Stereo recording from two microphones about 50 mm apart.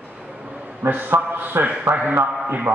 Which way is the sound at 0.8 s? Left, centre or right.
Right.